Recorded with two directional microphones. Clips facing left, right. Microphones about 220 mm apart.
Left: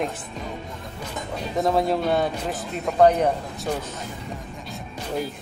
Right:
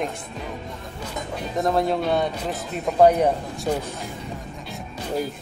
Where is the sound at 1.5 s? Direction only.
Centre (ahead or behind).